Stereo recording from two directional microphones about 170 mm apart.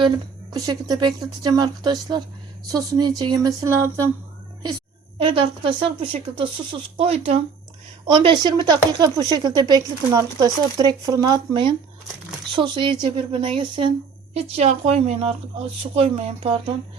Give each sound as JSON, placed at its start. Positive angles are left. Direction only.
{"t": 0.5, "sound": "speech", "side_deg": -20}
{"t": 5.2, "sound": "speech", "side_deg": -30}
{"t": 14.3, "sound": "speech", "side_deg": -40}